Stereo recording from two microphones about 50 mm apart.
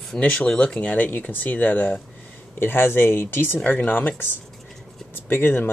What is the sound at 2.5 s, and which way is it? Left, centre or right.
Speech, left.